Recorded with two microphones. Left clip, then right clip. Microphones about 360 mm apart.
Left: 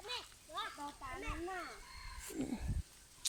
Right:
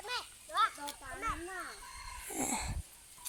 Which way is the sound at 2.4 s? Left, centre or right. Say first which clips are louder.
Right 8 dB; right.